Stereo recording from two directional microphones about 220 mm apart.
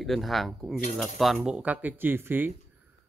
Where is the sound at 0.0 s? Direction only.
Centre (ahead or behind).